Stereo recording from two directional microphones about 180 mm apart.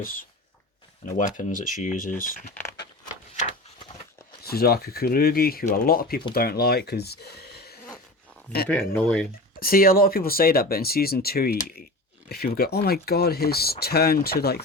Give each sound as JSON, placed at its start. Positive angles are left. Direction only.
{"t": 0.0, "sound": "speech", "side_deg": 50}
{"t": 1.4, "sound": "speech", "side_deg": 45}
{"t": 4.4, "sound": "speech", "side_deg": 60}
{"t": 8.6, "sound": "speech", "side_deg": 10}
{"t": 9.6, "sound": "speech", "side_deg": 55}